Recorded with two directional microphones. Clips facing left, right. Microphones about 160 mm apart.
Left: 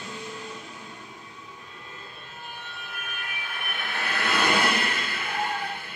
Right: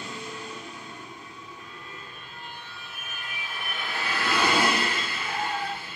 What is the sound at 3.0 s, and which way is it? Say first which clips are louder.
Vehicle: left 2 dB; 60° left (ahead or behind).